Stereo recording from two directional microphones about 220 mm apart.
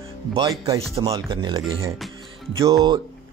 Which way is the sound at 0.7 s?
15° right (ahead or behind).